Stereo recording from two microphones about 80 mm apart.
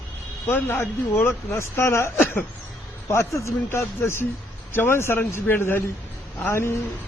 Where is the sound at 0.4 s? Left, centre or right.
Left.